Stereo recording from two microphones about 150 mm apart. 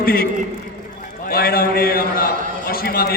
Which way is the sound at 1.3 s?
90° left.